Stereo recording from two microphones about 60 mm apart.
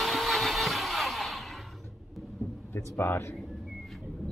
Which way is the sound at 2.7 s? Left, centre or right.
Left.